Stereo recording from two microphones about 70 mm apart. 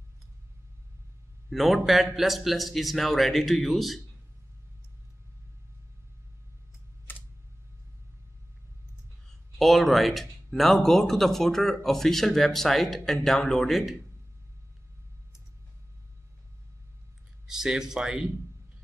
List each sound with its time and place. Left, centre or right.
1.5 s speech: centre
7.1 s computer keyboard: left
9.6 s speech: centre
17.5 s speech: centre